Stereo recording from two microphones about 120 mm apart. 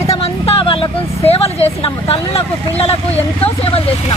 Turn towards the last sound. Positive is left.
turn(degrees=55)  # may be behind; listen again after turning